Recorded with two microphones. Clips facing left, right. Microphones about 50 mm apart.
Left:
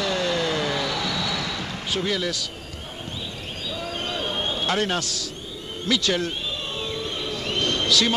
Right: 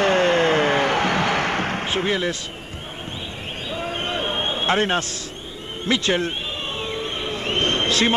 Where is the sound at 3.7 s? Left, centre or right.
Right.